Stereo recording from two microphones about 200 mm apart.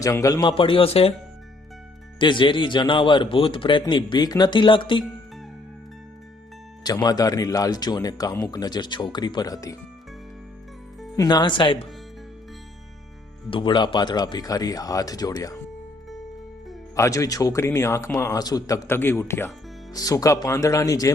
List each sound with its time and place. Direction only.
0.0 s speech: 15° left (ahead or behind)
2.1 s speech: 25° left (ahead or behind)
6.8 s speech: 20° left (ahead or behind)
11.2 s speech: 20° left (ahead or behind)
13.5 s speech: 25° left (ahead or behind)
16.9 s speech: 15° left (ahead or behind)